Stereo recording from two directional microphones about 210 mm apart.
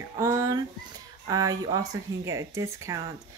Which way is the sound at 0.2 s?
15° right (ahead or behind).